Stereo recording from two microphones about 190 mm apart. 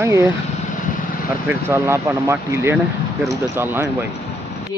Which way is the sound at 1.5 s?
15° right (ahead or behind).